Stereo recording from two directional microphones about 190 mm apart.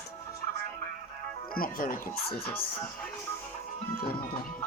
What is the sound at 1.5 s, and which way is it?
Speech, 50° left (ahead or behind).